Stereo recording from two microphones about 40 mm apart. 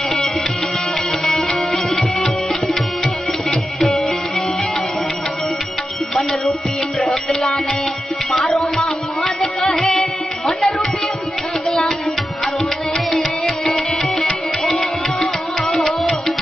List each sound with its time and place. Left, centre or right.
1.2 s music: centre
7.0 s music: centre
12.9 s music: centre